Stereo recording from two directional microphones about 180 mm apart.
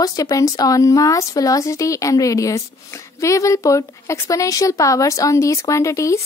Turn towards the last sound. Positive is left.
turn(degrees=15)  # may be behind; listen again after turning